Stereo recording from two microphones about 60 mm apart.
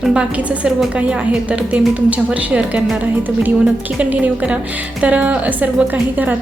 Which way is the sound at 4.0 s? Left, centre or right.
Right.